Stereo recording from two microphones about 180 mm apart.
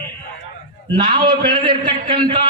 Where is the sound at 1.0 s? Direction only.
25° right (ahead or behind).